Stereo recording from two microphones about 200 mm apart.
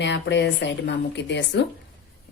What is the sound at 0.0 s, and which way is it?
A woman's voice, 60° left (ahead or behind).